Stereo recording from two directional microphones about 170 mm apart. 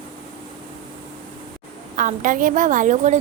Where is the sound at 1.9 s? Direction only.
50° right (ahead or behind).